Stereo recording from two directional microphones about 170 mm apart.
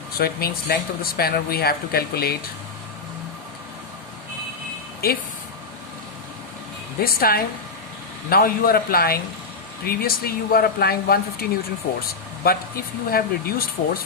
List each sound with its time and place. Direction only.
0.1 s speech: 60° left (ahead or behind)
5.0 s speech: 65° left (ahead or behind)
7.0 s speech: 60° left (ahead or behind)
12.4 s speech: 60° left (ahead or behind)